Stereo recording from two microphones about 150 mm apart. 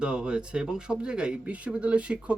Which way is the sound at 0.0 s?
5° right (ahead or behind).